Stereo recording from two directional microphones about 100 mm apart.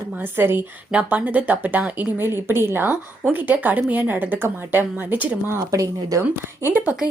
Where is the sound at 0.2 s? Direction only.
20° right (ahead or behind).